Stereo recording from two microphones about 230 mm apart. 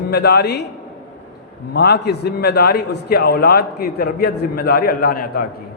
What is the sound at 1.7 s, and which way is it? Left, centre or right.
A man's voice, left.